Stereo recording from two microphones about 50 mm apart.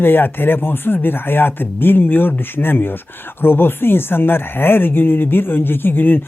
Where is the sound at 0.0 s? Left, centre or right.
Left.